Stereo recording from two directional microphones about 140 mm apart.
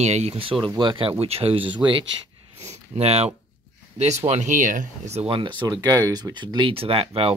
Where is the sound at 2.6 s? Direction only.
50° right (ahead or behind).